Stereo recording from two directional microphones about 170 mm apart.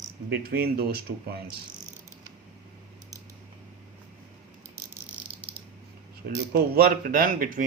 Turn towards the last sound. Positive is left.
turn(degrees=-55)  # may be behind; listen again after turning